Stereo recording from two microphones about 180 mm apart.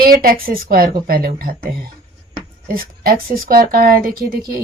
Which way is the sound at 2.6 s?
55° right (ahead or behind).